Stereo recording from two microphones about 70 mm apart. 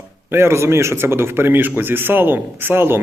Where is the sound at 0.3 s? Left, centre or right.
Right.